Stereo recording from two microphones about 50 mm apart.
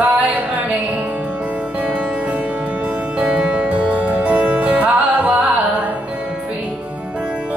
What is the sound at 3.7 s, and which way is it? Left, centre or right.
Music, right.